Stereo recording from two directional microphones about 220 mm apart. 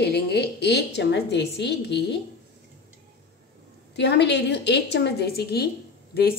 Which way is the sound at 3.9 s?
50° left (ahead or behind).